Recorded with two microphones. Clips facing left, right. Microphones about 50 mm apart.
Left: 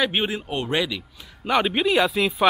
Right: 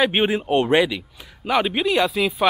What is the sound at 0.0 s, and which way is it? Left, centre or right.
Speech, right.